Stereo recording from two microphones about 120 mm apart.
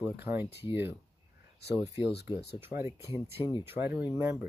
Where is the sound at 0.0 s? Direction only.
15° right (ahead or behind).